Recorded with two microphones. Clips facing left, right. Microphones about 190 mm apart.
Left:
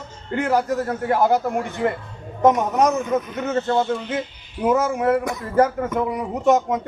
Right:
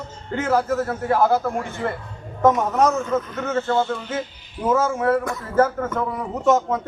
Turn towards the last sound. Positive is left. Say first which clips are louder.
# left 1 dB
turn(degrees=15)  # may be behind; listen again after turning